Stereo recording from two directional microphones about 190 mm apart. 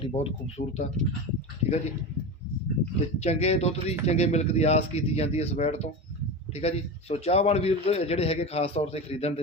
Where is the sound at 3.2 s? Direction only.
35° left (ahead or behind).